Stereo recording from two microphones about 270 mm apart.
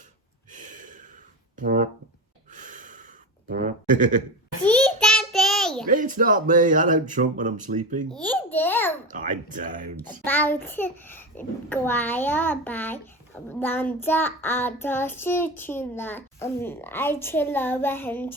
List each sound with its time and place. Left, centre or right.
0.5 s gasp: right
1.5 s speech: right
2.6 s a sound: right
3.5 s goat: right
4.6 s a sound: centre
5.9 s speech: right
8.1 s babbling: centre
9.0 s speech: right
10.0 s a child's voice: centre